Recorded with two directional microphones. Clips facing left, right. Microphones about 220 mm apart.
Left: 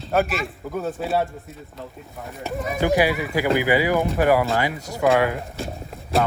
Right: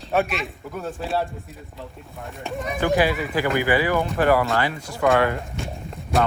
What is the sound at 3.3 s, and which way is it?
Speech, 15° left (ahead or behind).